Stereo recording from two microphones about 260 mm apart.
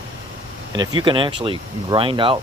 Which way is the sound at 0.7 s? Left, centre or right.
Centre.